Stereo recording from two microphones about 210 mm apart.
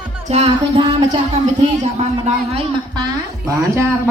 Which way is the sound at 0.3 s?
30° right (ahead or behind).